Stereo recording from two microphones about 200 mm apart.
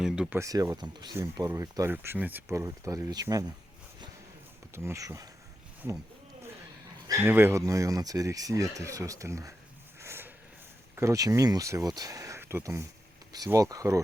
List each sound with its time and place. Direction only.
0.0 s speech: 5° right (ahead or behind)
4.7 s speech: 15° right (ahead or behind)
7.1 s speech: 10° right (ahead or behind)
10.0 s a sound: 10° right (ahead or behind)
10.9 s speech: 15° right (ahead or behind)